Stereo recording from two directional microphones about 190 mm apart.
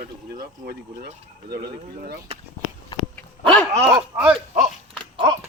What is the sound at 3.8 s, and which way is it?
Speech, 10° right (ahead or behind).